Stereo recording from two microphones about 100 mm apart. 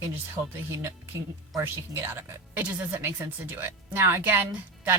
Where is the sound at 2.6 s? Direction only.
15° right (ahead or behind).